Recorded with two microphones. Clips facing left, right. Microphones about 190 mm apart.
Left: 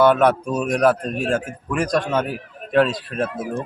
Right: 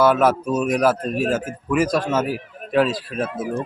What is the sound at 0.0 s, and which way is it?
Speech, 5° right (ahead or behind).